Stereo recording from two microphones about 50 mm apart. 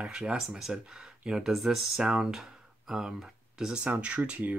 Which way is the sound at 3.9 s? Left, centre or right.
Right.